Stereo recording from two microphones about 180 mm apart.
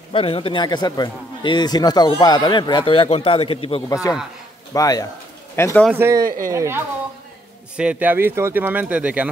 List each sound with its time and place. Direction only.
0.1 s speech: 30° left (ahead or behind)
4.7 s speech: 20° left (ahead or behind)
5.9 s speech: 15° right (ahead or behind)
6.2 s speech: 50° right (ahead or behind)
6.5 s speech: 15° right (ahead or behind)